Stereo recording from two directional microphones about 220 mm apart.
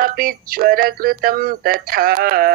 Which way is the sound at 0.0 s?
40° right (ahead or behind).